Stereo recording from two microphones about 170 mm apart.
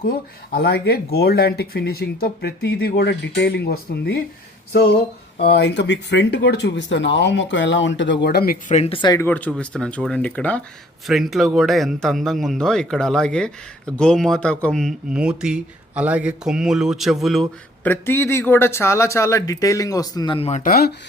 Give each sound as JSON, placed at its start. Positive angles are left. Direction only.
{"t": 0.0, "sound": "speech", "side_deg": 60}
{"t": 5.4, "sound": "speech", "side_deg": 80}
{"t": 8.7, "sound": "speech", "side_deg": 35}
{"t": 9.2, "sound": "speech", "side_deg": 10}
{"t": 17.8, "sound": "speech", "side_deg": 10}
{"t": 20.6, "sound": "speech", "side_deg": 60}